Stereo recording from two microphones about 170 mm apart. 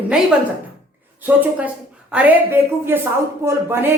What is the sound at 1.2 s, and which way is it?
A woman's voice, 10° right (ahead or behind).